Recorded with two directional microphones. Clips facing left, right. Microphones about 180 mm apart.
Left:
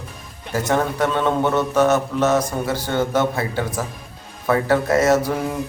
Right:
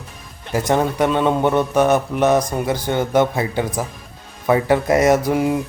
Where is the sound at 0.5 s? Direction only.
15° right (ahead or behind).